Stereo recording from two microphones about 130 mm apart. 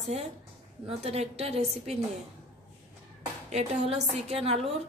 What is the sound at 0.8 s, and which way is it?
A woman's voice, 50° right (ahead or behind).